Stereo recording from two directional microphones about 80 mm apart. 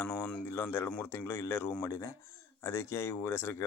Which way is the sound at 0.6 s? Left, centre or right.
Left.